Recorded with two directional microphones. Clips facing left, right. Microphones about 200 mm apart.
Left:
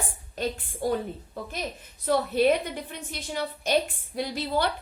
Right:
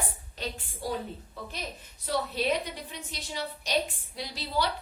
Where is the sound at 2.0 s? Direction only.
55° left (ahead or behind).